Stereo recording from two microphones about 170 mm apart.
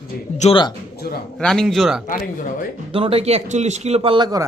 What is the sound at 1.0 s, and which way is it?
Speech, 65° left (ahead or behind).